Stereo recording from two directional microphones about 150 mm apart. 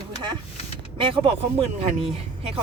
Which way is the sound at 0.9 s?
35° right (ahead or behind).